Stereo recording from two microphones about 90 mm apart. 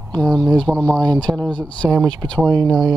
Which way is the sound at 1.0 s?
50° right (ahead or behind).